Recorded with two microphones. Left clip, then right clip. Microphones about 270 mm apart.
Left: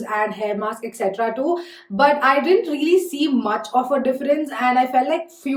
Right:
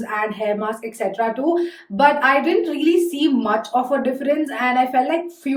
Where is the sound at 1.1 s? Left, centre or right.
Centre.